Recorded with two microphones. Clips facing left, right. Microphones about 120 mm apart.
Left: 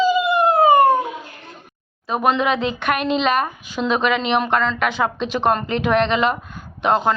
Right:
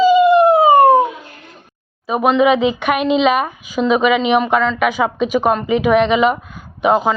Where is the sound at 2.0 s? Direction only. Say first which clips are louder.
Right 5 dB; 5° right (ahead or behind).